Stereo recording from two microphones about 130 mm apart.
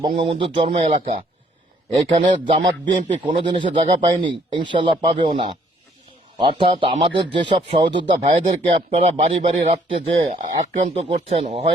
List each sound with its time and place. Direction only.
0.2 s speech: 45° right (ahead or behind)
0.8 s a man's voice: 60° right (ahead or behind)
1.9 s speech: 40° right (ahead or behind)
8.1 s a man's voice: 60° right (ahead or behind)
10.4 s speech: 80° right
10.9 s speech: 50° right (ahead or behind)